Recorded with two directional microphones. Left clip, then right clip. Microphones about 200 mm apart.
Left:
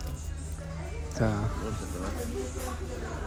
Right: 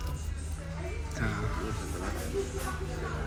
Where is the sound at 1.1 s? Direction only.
30° left (ahead or behind).